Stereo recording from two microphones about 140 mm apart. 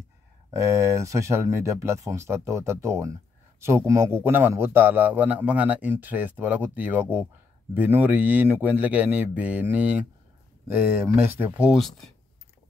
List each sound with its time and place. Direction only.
0.5 s a man's voice: 20° right (ahead or behind)